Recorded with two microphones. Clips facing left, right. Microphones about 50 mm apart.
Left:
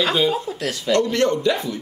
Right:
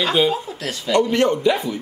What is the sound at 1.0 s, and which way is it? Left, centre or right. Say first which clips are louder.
Speech: right 3 dB; centre.